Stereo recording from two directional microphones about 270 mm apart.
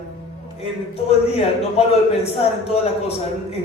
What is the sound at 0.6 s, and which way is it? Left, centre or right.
A man's voice, left.